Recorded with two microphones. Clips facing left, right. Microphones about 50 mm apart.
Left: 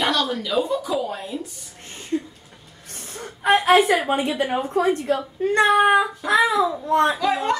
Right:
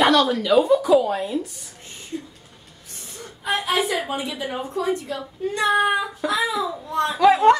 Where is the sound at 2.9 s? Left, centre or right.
Left.